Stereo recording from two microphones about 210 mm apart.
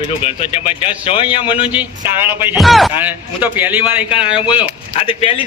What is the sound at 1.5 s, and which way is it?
Speech, 10° right (ahead or behind).